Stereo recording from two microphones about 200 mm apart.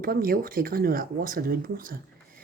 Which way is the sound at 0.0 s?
45° right (ahead or behind).